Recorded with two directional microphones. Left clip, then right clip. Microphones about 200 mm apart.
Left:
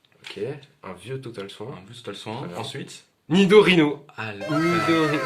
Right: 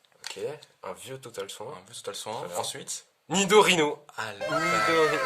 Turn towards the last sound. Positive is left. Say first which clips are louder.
# left 2 dB
turn(degrees=0)  # may be behind; listen again after turning